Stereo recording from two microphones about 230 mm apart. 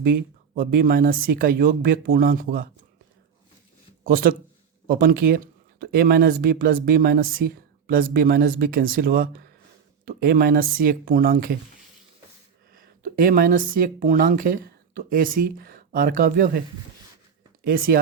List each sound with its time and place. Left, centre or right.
0.6 s speech: right
4.0 s speech: right
12.7 s speech: right
17.6 s speech: right